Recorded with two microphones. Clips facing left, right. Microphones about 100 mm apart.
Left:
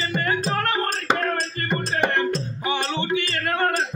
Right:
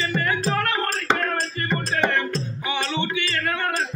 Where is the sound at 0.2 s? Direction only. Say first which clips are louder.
Left 2 dB; 40° left (ahead or behind).